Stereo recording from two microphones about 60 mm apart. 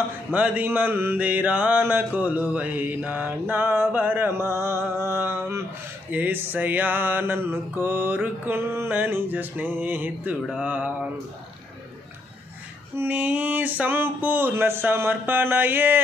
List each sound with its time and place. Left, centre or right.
0.3 s mantra: right
0.7 s mantra: right
1.1 s mantra: right
1.8 s mantra: right
12.9 s mantra: right